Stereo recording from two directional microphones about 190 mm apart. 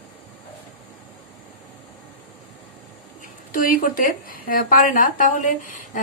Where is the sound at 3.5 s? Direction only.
45° left (ahead or behind).